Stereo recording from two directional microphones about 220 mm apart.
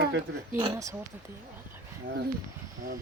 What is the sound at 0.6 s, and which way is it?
Speech, 15° right (ahead or behind).